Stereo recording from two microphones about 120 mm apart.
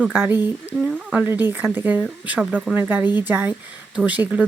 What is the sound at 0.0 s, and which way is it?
Speech, 15° right (ahead or behind).